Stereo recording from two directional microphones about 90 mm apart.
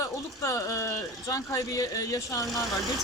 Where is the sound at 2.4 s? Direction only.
Centre (ahead or behind).